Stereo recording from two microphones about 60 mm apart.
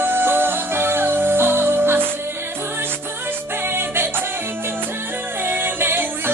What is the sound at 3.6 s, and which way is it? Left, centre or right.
Music, right.